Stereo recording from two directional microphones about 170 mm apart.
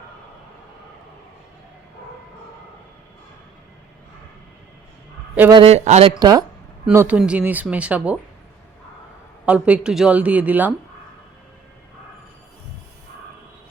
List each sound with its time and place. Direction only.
5.5 s a man's voice: 30° right (ahead or behind)
6.1 s speech: 20° right (ahead or behind)
6.9 s speech: 10° right (ahead or behind)
9.5 s speech: 5° right (ahead or behind)